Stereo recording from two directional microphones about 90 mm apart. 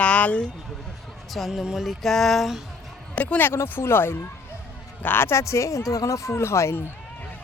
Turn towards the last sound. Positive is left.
turn(degrees=30)  # may be behind; listen again after turning